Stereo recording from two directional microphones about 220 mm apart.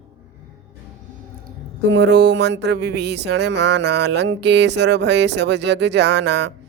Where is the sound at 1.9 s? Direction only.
50° right (ahead or behind).